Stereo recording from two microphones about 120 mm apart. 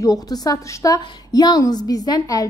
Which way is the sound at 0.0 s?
30° left (ahead or behind).